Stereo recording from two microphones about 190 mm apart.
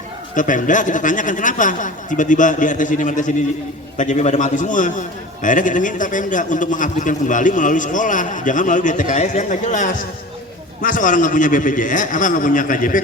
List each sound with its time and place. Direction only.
0.3 s a man's voice: 40° left (ahead or behind)